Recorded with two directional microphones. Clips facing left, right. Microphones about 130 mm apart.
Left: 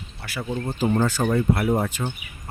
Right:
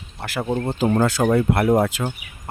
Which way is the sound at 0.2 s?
55° right (ahead or behind).